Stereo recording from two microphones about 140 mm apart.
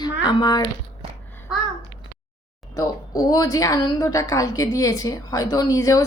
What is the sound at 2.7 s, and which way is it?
A woman's voice, 25° left (ahead or behind).